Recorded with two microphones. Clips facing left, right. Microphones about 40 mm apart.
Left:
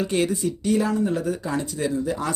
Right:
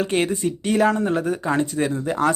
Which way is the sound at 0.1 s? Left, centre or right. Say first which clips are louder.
Right 1 dB; right.